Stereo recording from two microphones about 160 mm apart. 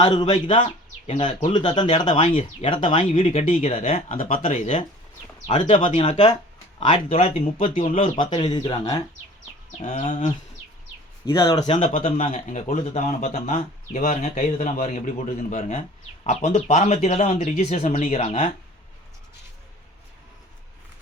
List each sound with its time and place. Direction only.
0.0 s speech: 30° left (ahead or behind)
0.6 s bird: 45° left (ahead or behind)
1.5 s speech: 30° left (ahead or behind)
4.2 s speech: 55° left (ahead or behind); by 9.0 s 30° left (ahead or behind)
9.8 s speech: 55° left (ahead or behind)
11.3 s speech: 30° left (ahead or behind)
11.9 s speech: 35° left (ahead or behind)
12.2 s speech: 50° left (ahead or behind)